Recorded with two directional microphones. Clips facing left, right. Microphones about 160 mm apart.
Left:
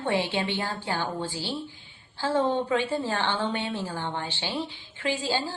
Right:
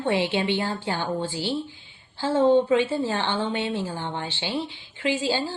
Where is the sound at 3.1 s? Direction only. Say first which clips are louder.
Right 2 dB; 15° right (ahead or behind).